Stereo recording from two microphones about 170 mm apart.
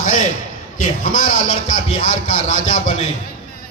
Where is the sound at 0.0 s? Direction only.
50° left (ahead or behind).